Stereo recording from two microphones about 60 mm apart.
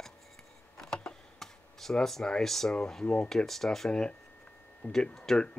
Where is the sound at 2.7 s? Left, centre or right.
Centre.